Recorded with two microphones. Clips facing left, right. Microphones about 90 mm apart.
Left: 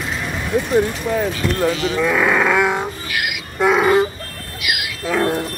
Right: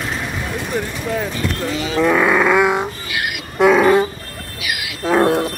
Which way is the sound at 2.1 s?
25° right (ahead or behind).